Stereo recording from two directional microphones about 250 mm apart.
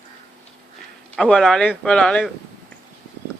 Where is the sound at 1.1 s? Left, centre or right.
Centre.